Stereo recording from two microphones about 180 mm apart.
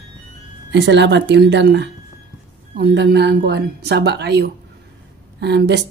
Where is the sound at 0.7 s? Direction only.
75° right (ahead or behind).